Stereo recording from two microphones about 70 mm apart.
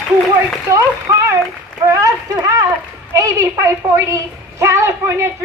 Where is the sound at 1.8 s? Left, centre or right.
Right.